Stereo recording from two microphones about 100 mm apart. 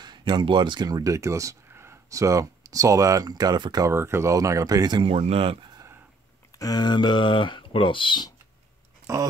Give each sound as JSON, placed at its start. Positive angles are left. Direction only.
{"t": 0.0, "sound": "speech", "side_deg": -50}
{"t": 3.8, "sound": "speech", "side_deg": -25}
{"t": 5.0, "sound": "speech", "side_deg": -90}
{"t": 6.6, "sound": "speech", "side_deg": 40}
{"t": 9.1, "sound": "speech", "side_deg": -30}